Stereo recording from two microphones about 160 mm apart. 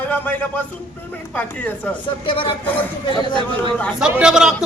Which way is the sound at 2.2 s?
35° left (ahead or behind).